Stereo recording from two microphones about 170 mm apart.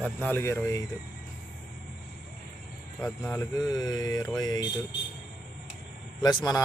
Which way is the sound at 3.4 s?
20° left (ahead or behind).